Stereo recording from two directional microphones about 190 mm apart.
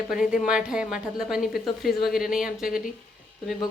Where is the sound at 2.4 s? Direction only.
45° left (ahead or behind).